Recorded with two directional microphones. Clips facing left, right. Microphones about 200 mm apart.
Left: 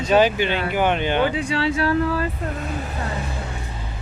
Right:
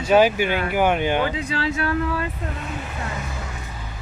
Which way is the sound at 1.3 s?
30° left (ahead or behind).